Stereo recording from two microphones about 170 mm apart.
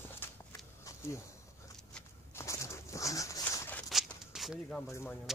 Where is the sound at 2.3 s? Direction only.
15° left (ahead or behind).